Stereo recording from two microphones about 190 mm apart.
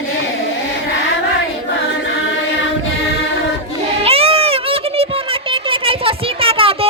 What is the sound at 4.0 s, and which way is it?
Music, 30° right (ahead or behind).